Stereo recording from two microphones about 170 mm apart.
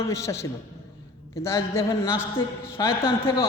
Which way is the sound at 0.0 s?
20° left (ahead or behind).